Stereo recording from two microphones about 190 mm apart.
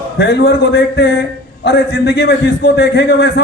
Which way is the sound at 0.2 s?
60° left (ahead or behind).